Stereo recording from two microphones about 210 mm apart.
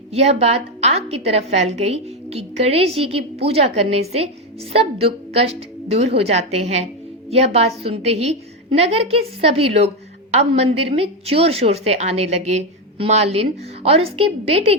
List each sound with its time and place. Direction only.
0.1 s a woman's voice: 30° right (ahead or behind)